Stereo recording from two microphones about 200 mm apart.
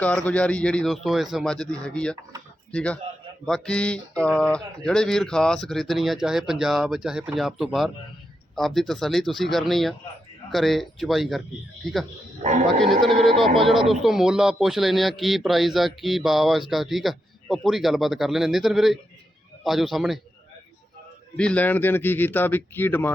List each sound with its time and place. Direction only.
0.0 s speech: 5° left (ahead or behind)
12.4 s a man's voice: 35° right (ahead or behind)
12.6 s speech: centre (ahead or behind)
21.3 s speech: 5° left (ahead or behind)